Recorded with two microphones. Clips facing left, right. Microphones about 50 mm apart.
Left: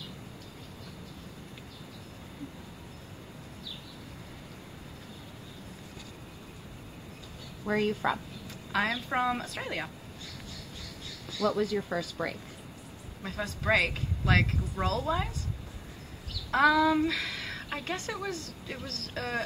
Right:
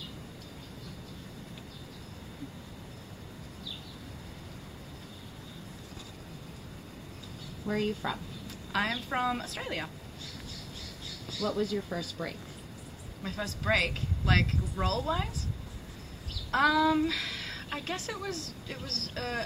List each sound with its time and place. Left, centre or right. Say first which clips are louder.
7.6 s speech: left 3 dB; left
8.7 s a woman's voice: left 2 dB; centre
11.3 s a woman's voice: left 3 dB; centre
16.4 s a woman's voice: left 2 dB; centre